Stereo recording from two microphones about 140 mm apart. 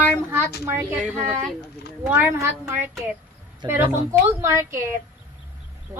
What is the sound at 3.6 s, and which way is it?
Speech, 35° right (ahead or behind).